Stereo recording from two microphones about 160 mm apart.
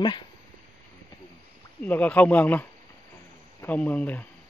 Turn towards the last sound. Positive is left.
turn(degrees=10)  # may be behind; listen again after turning